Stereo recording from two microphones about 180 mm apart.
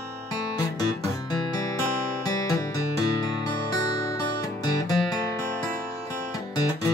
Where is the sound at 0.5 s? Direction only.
20° left (ahead or behind).